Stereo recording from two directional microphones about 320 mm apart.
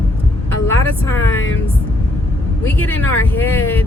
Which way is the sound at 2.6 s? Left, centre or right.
Centre.